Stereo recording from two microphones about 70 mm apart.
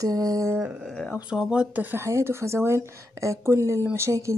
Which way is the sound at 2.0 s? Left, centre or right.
Right.